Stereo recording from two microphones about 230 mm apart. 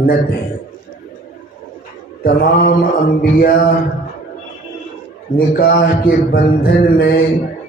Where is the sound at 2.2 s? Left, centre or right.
Left.